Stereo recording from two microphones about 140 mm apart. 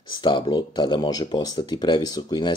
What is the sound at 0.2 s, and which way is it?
Speech, 35° left (ahead or behind).